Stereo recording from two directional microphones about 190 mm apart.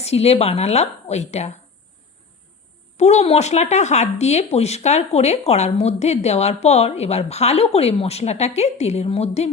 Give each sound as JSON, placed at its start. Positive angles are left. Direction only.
{"t": 0.0, "sound": "speech", "side_deg": 35}
{"t": 3.0, "sound": "speech", "side_deg": 35}